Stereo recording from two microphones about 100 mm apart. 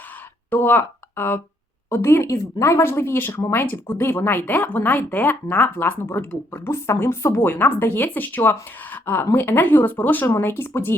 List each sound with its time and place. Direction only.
0.5 s speech: 20° left (ahead or behind)